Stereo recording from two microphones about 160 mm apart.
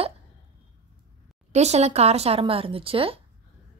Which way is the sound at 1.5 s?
45° right (ahead or behind).